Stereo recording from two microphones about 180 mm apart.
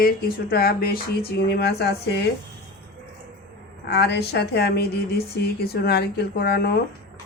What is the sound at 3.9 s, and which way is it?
Speech, 65° left (ahead or behind).